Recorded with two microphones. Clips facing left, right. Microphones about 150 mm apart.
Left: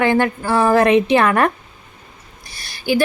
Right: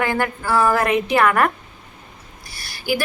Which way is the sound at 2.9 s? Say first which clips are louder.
Left 5 dB; 25° left (ahead or behind).